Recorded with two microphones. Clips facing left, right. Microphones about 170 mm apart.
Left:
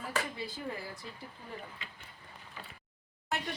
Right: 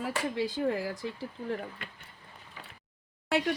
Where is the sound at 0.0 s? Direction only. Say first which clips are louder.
Right 6 dB; 90° right.